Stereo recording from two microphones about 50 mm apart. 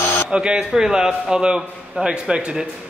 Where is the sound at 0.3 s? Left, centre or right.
Centre.